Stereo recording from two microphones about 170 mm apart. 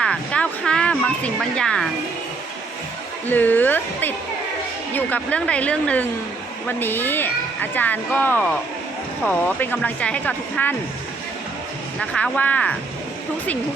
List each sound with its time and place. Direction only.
0.0 s a sound: 5° left (ahead or behind)
3.2 s speech: 10° left (ahead or behind)
11.9 s speech: 5° left (ahead or behind)